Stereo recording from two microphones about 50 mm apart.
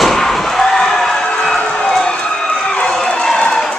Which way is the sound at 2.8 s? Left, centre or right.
Centre.